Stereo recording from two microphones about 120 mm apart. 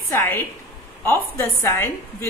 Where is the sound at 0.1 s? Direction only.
20° left (ahead or behind).